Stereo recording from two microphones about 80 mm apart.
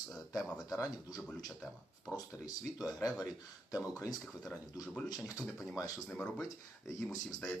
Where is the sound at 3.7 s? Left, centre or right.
Left.